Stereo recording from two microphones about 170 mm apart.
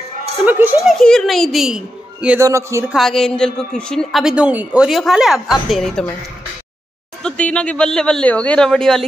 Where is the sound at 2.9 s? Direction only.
5° left (ahead or behind).